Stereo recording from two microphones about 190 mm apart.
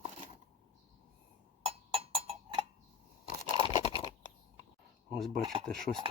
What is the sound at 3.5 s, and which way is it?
Crunch, 25° left (ahead or behind).